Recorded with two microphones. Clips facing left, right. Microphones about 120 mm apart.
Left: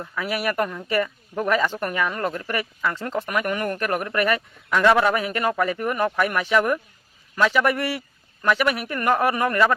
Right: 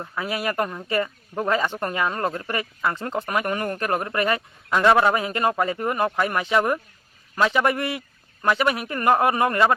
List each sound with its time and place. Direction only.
0.0 s speech: 25° right (ahead or behind)